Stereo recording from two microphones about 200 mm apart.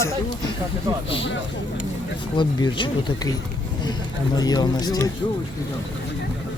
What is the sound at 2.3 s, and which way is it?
Speech, 25° left (ahead or behind).